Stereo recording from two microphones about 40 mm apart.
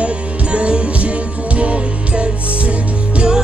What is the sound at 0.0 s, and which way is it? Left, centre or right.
Music, right.